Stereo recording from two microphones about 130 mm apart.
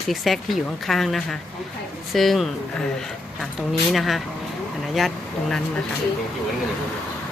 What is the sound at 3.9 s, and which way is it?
A woman's voice, centre (ahead or behind).